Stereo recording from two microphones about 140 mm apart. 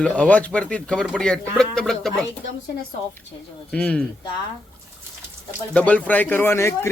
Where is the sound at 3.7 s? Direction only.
5° left (ahead or behind).